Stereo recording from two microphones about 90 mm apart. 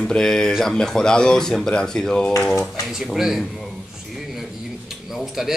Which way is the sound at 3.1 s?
5° right (ahead or behind).